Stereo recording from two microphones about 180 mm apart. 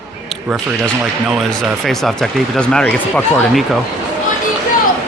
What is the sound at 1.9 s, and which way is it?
Speech, centre (ahead or behind).